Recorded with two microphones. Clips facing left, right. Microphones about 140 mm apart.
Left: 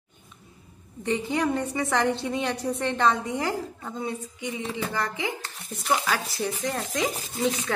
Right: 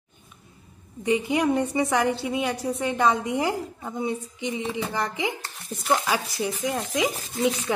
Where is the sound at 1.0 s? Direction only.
15° right (ahead or behind).